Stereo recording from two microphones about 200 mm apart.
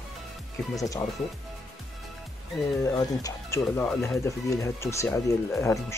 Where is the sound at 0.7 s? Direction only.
15° left (ahead or behind).